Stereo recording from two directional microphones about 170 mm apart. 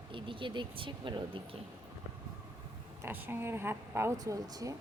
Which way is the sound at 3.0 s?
10° right (ahead or behind).